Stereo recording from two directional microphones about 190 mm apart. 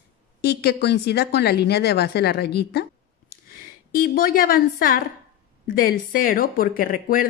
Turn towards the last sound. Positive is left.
turn(degrees=45)  # may be behind; listen again after turning